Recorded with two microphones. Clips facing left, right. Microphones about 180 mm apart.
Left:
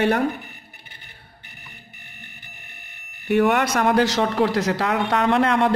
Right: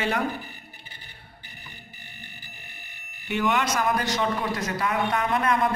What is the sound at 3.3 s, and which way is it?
A man's voice, 55° left (ahead or behind).